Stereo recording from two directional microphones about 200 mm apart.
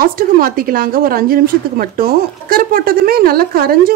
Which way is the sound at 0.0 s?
45° right (ahead or behind).